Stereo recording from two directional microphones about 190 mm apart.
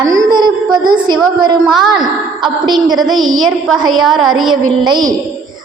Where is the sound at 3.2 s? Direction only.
90° right.